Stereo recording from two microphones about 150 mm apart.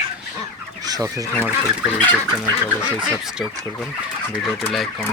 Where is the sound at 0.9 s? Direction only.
20° right (ahead or behind).